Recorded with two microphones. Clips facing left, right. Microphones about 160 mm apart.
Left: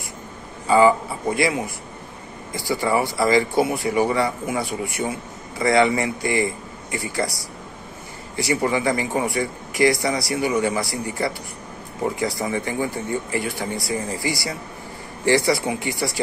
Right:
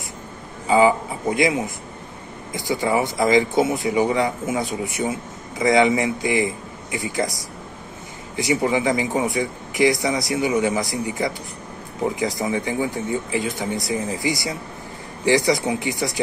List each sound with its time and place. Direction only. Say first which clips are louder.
0.7 s a man's voice: left 1 dB; 15° right (ahead or behind)
8.6 s a man's voice: right 1 dB; 20° right (ahead or behind)